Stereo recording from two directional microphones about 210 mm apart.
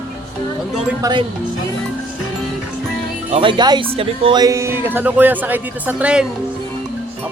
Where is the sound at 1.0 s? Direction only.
20° right (ahead or behind).